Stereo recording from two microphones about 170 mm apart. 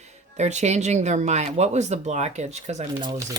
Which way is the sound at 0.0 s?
40° right (ahead or behind).